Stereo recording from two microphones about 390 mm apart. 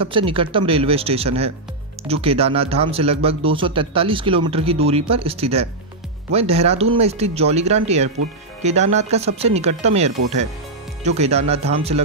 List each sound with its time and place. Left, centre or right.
0.0 s speech: centre